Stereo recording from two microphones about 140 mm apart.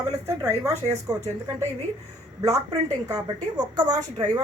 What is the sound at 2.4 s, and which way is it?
A woman's voice, 25° right (ahead or behind).